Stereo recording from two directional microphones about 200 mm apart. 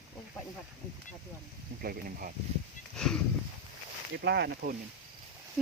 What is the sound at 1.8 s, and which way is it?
Speech, 45° right (ahead or behind).